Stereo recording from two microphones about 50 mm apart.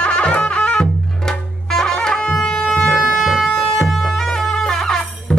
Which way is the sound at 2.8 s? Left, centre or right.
Centre.